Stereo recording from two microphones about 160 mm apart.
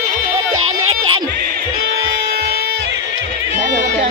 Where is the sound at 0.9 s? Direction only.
35° right (ahead or behind).